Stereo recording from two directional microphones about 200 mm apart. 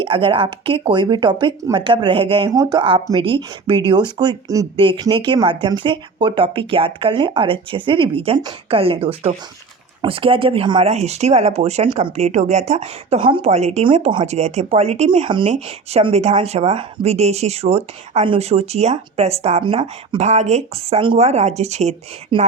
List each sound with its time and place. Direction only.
0.0 s speech: 25° right (ahead or behind)